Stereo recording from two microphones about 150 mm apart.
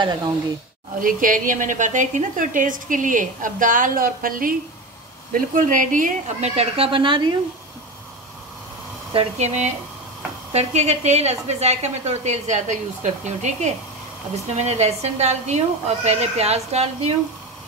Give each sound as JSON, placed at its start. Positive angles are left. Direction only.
{"t": 0.0, "sound": "speech", "side_deg": -25}
{"t": 1.0, "sound": "a woman's voice", "side_deg": -65}
{"t": 9.1, "sound": "a woman's voice", "side_deg": -45}